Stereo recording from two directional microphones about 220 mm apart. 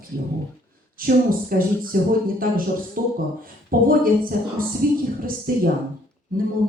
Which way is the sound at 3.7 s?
40° right (ahead or behind).